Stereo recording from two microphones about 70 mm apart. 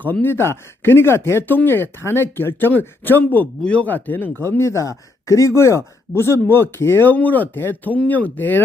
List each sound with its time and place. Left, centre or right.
0.0 s speech: left
3.6 s speech: centre